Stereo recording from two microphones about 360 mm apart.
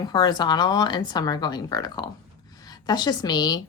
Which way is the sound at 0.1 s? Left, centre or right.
Centre.